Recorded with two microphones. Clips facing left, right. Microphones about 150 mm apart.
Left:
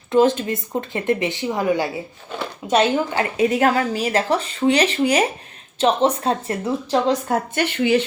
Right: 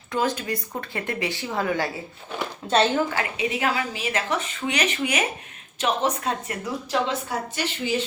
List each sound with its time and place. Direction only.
0.1 s speech: 25° left (ahead or behind)
3.3 s speech: 45° left (ahead or behind)
7.3 s speech: 55° left (ahead or behind)